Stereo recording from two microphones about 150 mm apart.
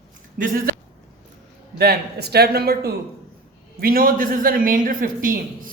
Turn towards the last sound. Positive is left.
turn(degrees=-65)  # may be behind; listen again after turning